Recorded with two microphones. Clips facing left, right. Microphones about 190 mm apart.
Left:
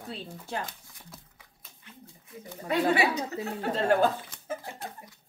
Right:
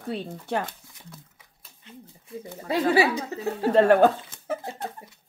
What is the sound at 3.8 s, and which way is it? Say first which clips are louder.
Speech: right 7 dB; 65° right (ahead or behind).